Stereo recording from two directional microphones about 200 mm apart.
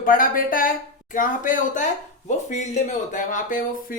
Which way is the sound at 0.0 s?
45° left (ahead or behind).